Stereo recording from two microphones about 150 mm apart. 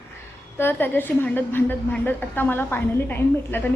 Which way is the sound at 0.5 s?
15° left (ahead or behind).